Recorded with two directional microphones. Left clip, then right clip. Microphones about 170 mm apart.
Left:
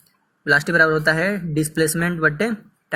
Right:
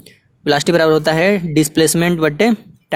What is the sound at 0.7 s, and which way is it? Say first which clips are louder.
Speech: right 6 dB; 60° right (ahead or behind).